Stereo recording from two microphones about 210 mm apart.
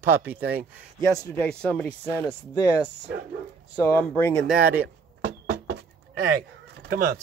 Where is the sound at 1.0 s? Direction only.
5° left (ahead or behind).